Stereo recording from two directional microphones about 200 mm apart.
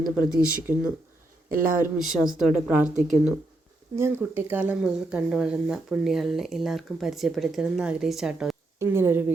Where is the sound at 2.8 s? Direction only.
35° right (ahead or behind).